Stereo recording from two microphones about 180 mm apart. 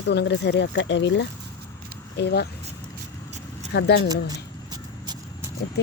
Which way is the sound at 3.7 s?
70° left (ahead or behind).